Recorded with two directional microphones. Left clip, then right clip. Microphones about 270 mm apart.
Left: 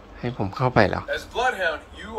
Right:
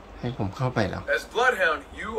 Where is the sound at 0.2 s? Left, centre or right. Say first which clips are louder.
Left 5 dB; centre.